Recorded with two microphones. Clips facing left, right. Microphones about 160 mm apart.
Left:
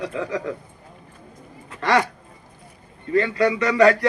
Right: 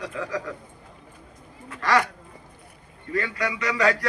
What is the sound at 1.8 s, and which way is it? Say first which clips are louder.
Speech: left 3 dB; 25° left (ahead or behind).